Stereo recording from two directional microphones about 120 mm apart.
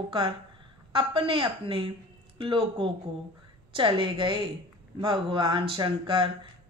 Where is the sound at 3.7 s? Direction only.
45° right (ahead or behind).